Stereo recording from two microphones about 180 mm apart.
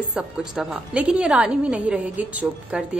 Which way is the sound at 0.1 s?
5° right (ahead or behind).